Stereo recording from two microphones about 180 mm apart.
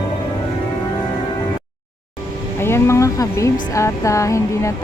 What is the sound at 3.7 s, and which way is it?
Speech, 15° left (ahead or behind).